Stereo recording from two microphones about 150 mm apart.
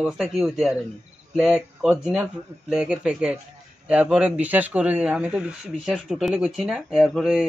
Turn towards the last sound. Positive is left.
turn(degrees=-5)  # may be behind; listen again after turning